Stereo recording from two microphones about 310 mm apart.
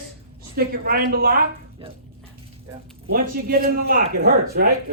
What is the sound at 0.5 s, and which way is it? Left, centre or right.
Speech, right.